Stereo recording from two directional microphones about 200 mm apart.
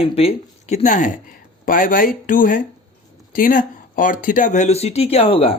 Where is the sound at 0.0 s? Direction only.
30° left (ahead or behind).